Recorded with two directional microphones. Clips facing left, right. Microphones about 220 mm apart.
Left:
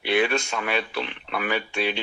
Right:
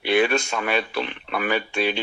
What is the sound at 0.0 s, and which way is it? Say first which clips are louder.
Speech: right 3 dB; 45° right (ahead or behind).